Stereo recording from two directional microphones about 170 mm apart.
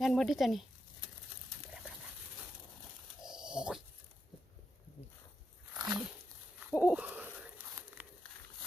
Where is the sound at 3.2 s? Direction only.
5° right (ahead or behind).